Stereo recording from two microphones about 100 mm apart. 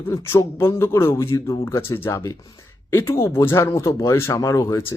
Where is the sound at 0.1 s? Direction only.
25° left (ahead or behind).